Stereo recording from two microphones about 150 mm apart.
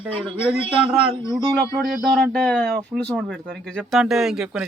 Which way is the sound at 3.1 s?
5° right (ahead or behind).